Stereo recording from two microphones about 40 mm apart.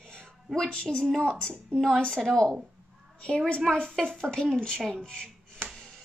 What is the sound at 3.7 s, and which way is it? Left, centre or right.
A woman's voice, left.